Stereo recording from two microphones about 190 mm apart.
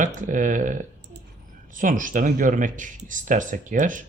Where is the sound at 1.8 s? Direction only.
45° right (ahead or behind).